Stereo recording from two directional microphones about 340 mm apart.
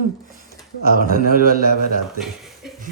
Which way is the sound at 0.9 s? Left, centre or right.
Right.